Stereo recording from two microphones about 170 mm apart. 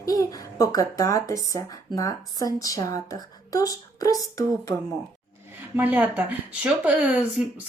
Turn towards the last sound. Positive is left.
turn(degrees=-5)  # may be behind; listen again after turning